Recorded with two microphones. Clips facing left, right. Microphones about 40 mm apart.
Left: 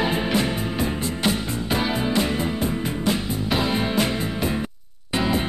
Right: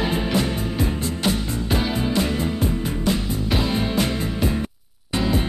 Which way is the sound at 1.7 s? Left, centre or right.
Centre.